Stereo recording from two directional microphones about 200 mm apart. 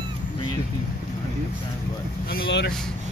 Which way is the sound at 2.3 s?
50° left (ahead or behind).